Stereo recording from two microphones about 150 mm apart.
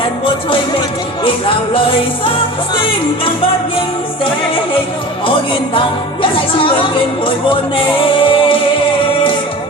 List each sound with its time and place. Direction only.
1.2 s music: 35° left (ahead or behind)
6.6 s music: 35° left (ahead or behind)